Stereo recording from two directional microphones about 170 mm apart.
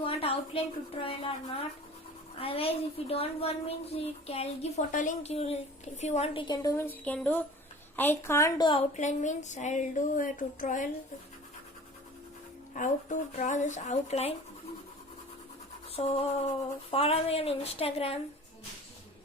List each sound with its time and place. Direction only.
0.0 s a woman's voice: 35° left (ahead or behind)
6.5 s speech: 20° left (ahead or behind)
8.9 s speech: 45° left (ahead or behind)
12.7 s a woman's voice: 45° left (ahead or behind)
16.0 s a woman's voice: 35° left (ahead or behind)